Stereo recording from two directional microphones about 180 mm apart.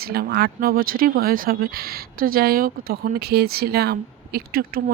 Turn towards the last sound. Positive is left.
turn(degrees=-55)  # may be behind; listen again after turning